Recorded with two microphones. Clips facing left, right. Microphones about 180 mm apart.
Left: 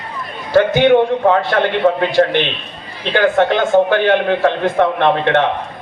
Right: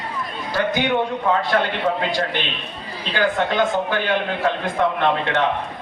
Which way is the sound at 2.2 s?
50° left (ahead or behind).